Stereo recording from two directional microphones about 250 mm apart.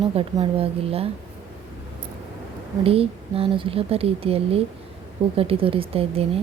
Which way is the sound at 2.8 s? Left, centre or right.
Right.